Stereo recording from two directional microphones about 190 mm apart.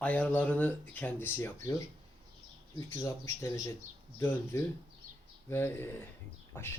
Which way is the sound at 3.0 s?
15° left (ahead or behind).